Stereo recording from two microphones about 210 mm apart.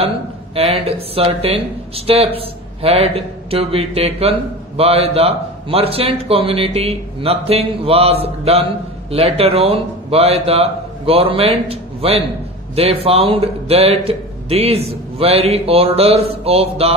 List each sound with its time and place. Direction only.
0.6 s speech: 25° right (ahead or behind)